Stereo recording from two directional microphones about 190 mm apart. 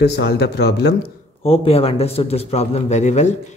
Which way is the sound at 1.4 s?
30° left (ahead or behind).